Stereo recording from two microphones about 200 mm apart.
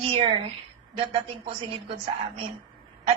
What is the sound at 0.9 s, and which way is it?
A woman's voice, 30° right (ahead or behind).